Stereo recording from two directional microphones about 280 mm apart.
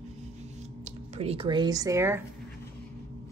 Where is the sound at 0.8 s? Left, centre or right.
Right.